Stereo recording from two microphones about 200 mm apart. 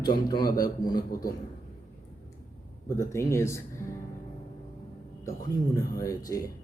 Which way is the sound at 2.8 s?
15° left (ahead or behind).